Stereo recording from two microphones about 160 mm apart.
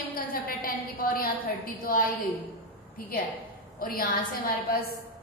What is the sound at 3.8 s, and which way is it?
A woman's voice, 60° left (ahead or behind).